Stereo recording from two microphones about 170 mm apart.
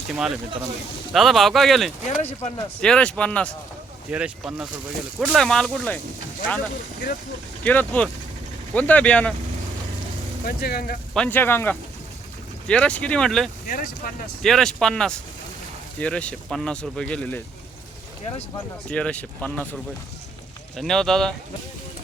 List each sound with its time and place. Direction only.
0.1 s speech: 5° right (ahead or behind)
2.0 s speech: 40° left (ahead or behind)
2.8 s speech: 5° left (ahead or behind)
4.1 s speech: 5° right (ahead or behind)
7.6 s speech: 10° left (ahead or behind)
10.4 s speech: 65° left (ahead or behind)
11.1 s speech: 5° left (ahead or behind)
13.7 s speech: 55° left (ahead or behind)
14.4 s speech: centre (ahead or behind)
18.9 s speech: 5° left (ahead or behind)
20.7 s speech: 5° left (ahead or behind)